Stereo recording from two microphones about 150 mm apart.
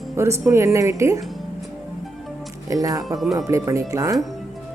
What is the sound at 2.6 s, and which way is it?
Speech, 25° right (ahead or behind).